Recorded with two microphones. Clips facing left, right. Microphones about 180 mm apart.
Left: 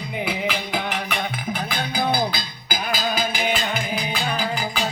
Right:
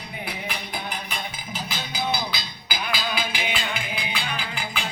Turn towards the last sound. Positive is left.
turn(degrees=40)  # may be behind; listen again after turning